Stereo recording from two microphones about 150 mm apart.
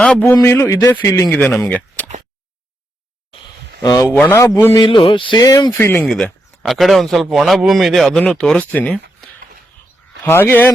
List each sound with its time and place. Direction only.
0.0 s a man's voice: 10° left (ahead or behind)
4.0 s speech: 10° left (ahead or behind)
4.8 s speech: 35° left (ahead or behind); by 6.1 s 15° left (ahead or behind)
6.1 s speech: 5° left (ahead or behind)